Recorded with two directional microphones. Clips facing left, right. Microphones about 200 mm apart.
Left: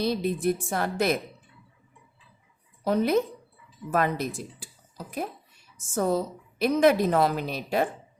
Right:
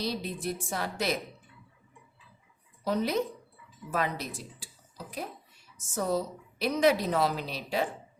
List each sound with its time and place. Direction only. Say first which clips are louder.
0.0 s a woman's voice: left 8 dB; 55° left (ahead or behind)
2.8 s a woman's voice: left 5 dB; 55° left (ahead or behind)
5.7 s a woman's voice: left 4 dB; 50° left (ahead or behind)